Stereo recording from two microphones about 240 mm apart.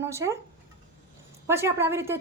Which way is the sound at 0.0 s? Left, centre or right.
Centre.